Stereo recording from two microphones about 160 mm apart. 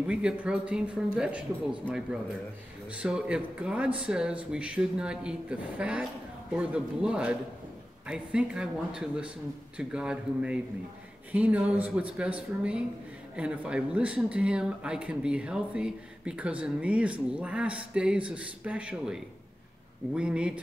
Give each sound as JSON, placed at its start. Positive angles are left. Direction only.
{"t": 0.0, "sound": "speech", "side_deg": -5}